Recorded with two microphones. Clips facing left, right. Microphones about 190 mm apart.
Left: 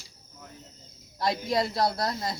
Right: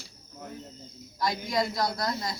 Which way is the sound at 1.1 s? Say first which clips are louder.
Left 2 dB; 30° left (ahead or behind).